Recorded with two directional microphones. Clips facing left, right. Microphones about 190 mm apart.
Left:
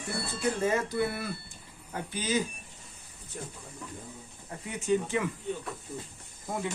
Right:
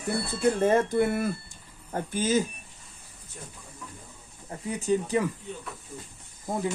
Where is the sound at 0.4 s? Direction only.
55° right (ahead or behind).